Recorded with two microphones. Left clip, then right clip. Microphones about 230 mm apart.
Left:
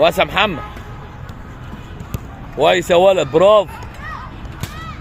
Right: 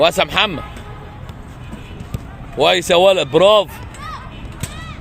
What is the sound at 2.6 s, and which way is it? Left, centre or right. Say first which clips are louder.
A man's voice: even; centre.